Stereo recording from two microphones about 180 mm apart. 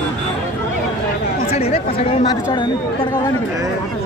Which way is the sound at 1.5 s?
35° left (ahead or behind).